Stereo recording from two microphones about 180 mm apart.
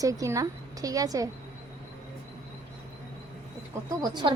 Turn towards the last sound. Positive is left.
turn(degrees=-25)  # may be behind; listen again after turning